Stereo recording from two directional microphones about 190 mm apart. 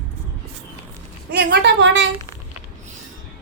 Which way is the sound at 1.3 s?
60° right (ahead or behind).